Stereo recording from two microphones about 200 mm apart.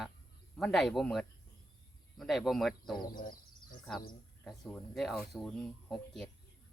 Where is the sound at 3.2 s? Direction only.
45° left (ahead or behind).